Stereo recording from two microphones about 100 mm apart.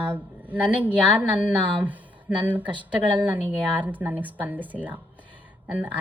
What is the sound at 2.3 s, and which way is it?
Speech, 5° right (ahead or behind).